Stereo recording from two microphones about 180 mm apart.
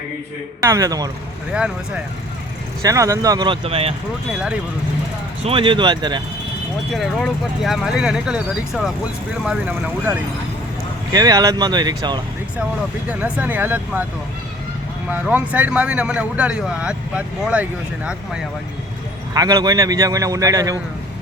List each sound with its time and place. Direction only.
0.6 s speech: 15° right (ahead or behind)
2.8 s speech: 20° right (ahead or behind); by 3.9 s 35° right (ahead or behind)
4.3 s speech: 5° right (ahead or behind)
5.4 s speech: 30° right (ahead or behind)
6.9 s a man's voice: centre (ahead or behind)
11.1 s speech: 20° right (ahead or behind)
13.1 s a man's voice: 10° right (ahead or behind)
15.1 s a man's voice: 10° right (ahead or behind)
19.3 s speech: 20° right (ahead or behind)